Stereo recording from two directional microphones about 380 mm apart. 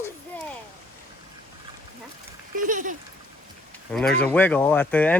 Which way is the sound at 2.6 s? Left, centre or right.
Centre.